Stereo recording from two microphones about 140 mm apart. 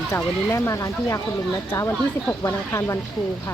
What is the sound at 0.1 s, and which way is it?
Speech, 20° left (ahead or behind).